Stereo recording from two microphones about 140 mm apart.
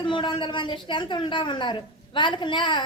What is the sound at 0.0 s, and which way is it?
A woman's voice, 35° left (ahead or behind).